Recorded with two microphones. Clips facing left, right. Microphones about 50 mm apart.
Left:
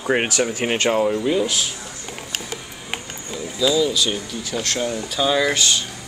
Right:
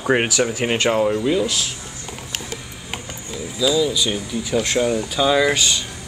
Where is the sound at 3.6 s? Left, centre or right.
Centre.